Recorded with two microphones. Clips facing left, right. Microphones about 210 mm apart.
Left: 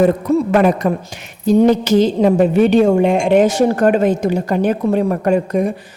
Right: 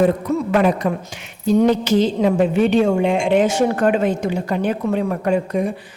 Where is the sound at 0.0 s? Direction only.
45° left (ahead or behind).